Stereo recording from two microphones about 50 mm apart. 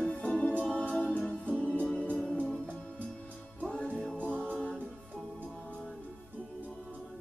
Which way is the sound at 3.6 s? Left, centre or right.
Left.